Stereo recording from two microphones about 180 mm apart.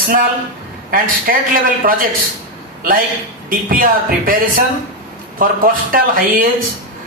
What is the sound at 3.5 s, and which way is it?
Speech, 50° right (ahead or behind).